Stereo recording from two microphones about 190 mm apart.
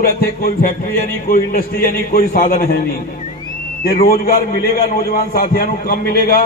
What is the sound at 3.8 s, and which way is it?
A man's voice, 50° left (ahead or behind).